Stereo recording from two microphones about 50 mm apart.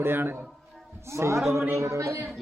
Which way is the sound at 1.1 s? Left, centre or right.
Right.